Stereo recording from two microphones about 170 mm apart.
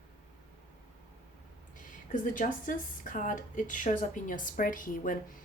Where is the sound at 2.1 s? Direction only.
50° left (ahead or behind).